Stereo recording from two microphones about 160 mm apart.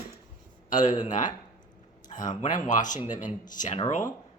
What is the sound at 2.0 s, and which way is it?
Speech, 55° left (ahead or behind).